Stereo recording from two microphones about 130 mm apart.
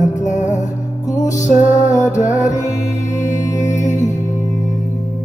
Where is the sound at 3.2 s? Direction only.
25° left (ahead or behind).